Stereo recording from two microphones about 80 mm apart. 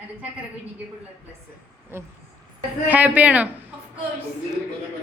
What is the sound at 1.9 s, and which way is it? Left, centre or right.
Speech, right.